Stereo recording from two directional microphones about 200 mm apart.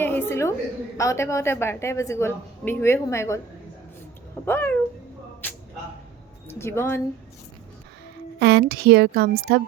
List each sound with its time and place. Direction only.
0.0 s a sound: 10° left (ahead or behind)
0.9 s a woman's voice: 15° left (ahead or behind)
4.4 s a woman's voice: 10° left (ahead or behind)
5.4 s a sound: 10° left (ahead or behind)
6.5 s a woman's voice: 10° left (ahead or behind)
8.4 s a woman's voice: 55° right (ahead or behind)